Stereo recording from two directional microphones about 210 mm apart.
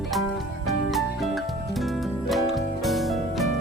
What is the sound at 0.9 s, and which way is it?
Music, centre (ahead or behind).